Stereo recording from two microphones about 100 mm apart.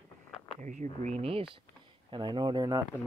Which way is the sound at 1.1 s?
70° right (ahead or behind).